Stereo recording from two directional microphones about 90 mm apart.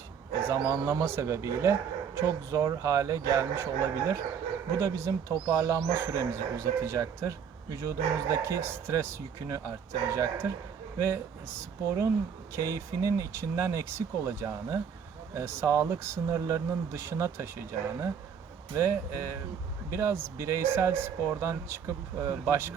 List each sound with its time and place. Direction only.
1.0 s speech: 30° right (ahead or behind)
5.3 s speech: 45° right (ahead or behind); by 22.7 s 30° right (ahead or behind)